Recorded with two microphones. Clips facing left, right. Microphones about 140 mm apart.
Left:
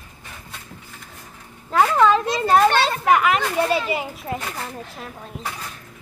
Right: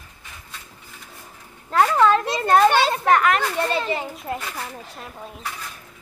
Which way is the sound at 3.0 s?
5° left (ahead or behind).